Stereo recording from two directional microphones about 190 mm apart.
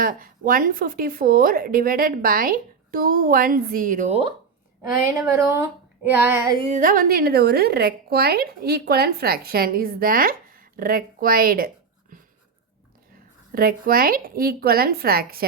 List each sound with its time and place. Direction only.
0.0 s a woman's voice: 50° right (ahead or behind); by 4.4 s 30° right (ahead or behind)
4.8 s speech: 10° right (ahead or behind)
6.7 s a woman's voice: 45° right (ahead or behind)
13.5 s a woman's voice: 50° right (ahead or behind)